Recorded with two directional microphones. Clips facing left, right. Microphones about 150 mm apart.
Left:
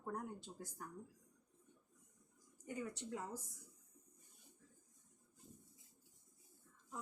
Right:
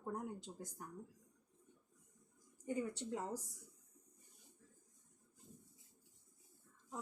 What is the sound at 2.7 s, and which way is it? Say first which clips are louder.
Speech: right 5 dB; 30° right (ahead or behind).